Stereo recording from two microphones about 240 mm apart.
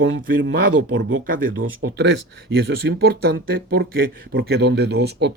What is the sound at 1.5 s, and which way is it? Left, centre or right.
Speech, right.